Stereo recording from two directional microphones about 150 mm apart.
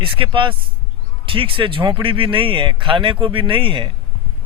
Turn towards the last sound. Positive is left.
turn(degrees=-35)  # may be behind; listen again after turning